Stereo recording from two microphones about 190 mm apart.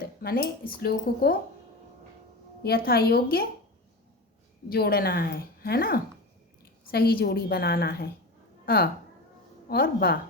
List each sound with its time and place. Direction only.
0.2 s a woman's voice: 55° left (ahead or behind)
2.6 s a woman's voice: 55° left (ahead or behind)
4.7 s a woman's voice: 55° left (ahead or behind)